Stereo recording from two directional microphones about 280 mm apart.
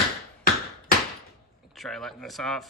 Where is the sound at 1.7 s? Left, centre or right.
Centre.